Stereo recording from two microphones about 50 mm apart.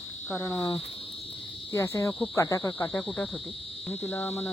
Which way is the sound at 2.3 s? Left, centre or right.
Left.